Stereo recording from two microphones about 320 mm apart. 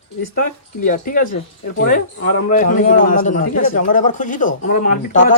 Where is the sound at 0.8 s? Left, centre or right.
Left.